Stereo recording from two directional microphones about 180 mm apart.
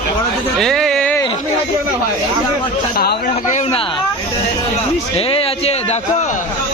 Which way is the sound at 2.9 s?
60° left (ahead or behind).